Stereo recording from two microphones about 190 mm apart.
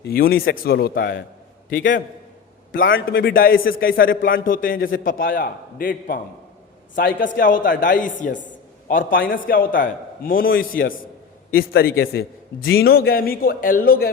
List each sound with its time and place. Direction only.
0.0 s a man's voice: 50° left (ahead or behind)
1.8 s a man's voice: 70° left (ahead or behind)
3.1 s a man's voice: 55° left (ahead or behind)